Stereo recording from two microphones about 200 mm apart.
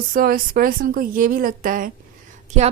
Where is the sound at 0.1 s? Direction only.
45° right (ahead or behind).